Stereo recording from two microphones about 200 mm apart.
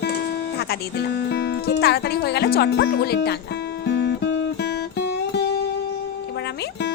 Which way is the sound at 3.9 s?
60° left (ahead or behind).